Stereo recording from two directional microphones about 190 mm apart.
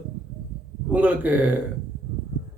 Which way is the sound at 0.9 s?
10° right (ahead or behind).